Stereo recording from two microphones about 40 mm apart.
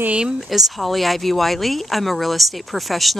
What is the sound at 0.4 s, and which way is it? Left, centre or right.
Speech, centre.